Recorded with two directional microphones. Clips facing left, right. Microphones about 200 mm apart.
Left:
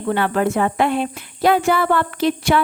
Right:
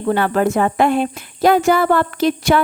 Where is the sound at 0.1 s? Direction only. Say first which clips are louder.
Right 2 dB; 40° right (ahead or behind).